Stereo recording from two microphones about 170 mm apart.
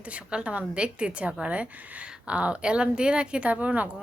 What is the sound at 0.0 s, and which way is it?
A woman's voice, 5° right (ahead or behind).